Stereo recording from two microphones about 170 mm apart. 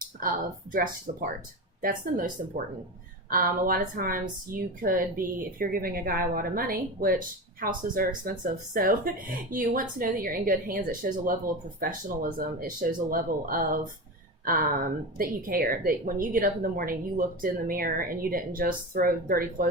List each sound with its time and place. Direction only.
0.2 s a woman's voice: 55° right (ahead or behind)
11.8 s a woman's voice: 55° right (ahead or behind)